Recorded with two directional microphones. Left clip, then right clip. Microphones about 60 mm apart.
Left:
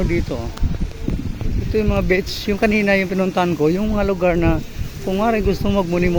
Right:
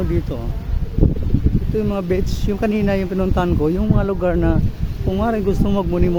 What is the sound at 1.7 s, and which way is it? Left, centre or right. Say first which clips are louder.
Speech: left 3 dB; centre.